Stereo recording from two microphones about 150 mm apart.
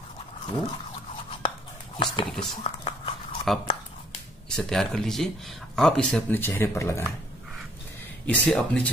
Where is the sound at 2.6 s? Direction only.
40° left (ahead or behind).